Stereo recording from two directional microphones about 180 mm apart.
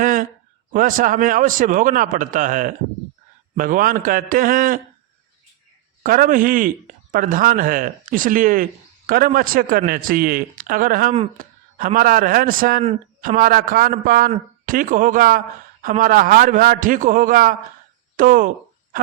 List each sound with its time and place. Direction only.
0.0 s a sound: 50° right (ahead or behind)
0.7 s a man's voice: 50° right (ahead or behind)
6.0 s a man's voice: 50° right (ahead or behind)